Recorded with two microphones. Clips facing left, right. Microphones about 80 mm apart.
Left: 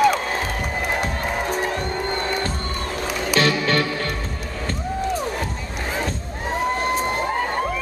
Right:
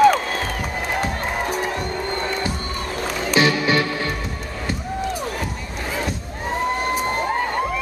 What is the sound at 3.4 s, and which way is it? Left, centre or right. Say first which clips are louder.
Music: right 2 dB; centre.